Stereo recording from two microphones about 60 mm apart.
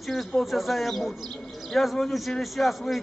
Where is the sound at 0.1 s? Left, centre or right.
Centre.